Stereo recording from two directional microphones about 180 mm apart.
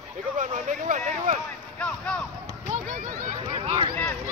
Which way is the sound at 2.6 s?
45° right (ahead or behind).